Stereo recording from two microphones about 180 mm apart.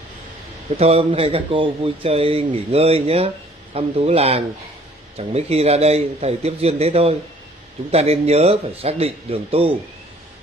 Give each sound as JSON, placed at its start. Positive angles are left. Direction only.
{"t": 0.7, "sound": "speech", "side_deg": -35}